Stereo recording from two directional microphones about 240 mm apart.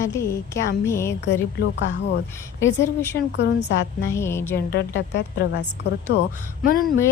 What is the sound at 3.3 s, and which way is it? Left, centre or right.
Speech, left.